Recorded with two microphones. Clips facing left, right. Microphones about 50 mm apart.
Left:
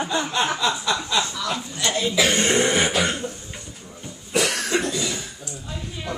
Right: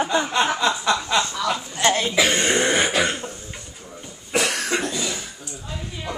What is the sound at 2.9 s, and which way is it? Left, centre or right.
Cough, centre.